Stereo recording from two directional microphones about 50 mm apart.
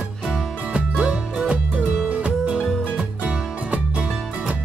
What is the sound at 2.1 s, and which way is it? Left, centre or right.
Music, right.